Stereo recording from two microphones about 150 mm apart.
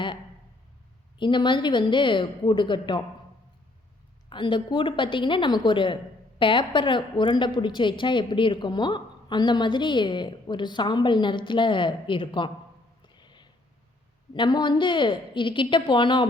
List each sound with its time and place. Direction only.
1.2 s a woman's voice: 30° left (ahead or behind)
4.3 s a woman's voice: 30° left (ahead or behind)
13.1 s a sound: 30° left (ahead or behind)
14.3 s a woman's voice: 30° left (ahead or behind)